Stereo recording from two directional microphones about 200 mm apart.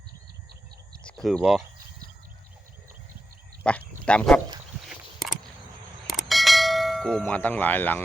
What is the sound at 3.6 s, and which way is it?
Speech, 5° left (ahead or behind).